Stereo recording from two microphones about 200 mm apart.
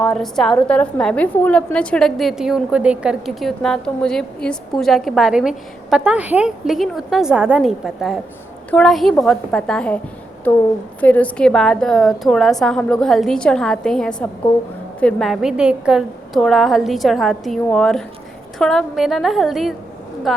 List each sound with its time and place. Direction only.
0.0 s a woman's voice: centre (ahead or behind)